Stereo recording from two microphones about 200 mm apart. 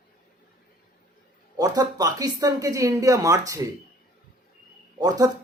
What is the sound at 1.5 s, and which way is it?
A man's voice, 20° right (ahead or behind).